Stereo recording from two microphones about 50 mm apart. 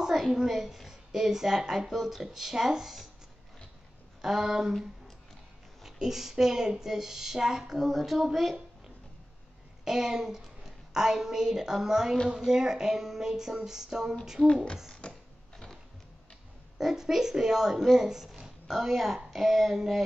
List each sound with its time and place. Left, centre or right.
0.0 s a woman's voice: centre
4.2 s speech: centre
5.8 s speech: centre
9.8 s speech: centre
14.4 s speech: centre
15.0 s pig: centre
16.7 s speech: centre